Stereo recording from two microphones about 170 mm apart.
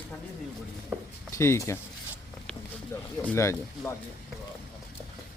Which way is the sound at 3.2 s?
10° left (ahead or behind).